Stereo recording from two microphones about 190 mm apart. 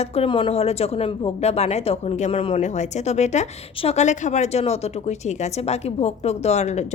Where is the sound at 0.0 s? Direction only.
30° left (ahead or behind).